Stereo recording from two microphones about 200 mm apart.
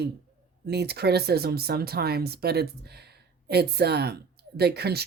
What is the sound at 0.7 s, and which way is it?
Speech, 55° right (ahead or behind).